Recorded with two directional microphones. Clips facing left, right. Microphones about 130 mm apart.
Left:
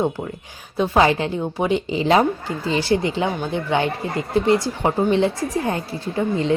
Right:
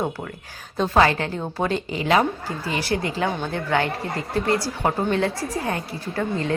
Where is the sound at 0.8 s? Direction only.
15° left (ahead or behind).